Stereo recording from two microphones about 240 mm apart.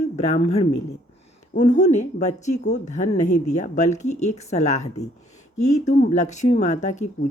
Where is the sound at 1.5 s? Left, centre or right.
Left.